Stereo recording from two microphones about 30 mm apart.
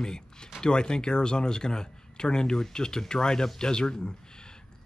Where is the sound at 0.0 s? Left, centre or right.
Left.